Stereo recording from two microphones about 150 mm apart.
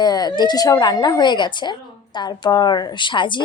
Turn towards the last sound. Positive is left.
turn(degrees=30)  # may be behind; listen again after turning